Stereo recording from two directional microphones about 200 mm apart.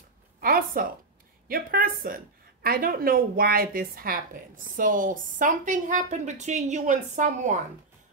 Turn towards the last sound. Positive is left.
turn(degrees=-40)  # may be behind; listen again after turning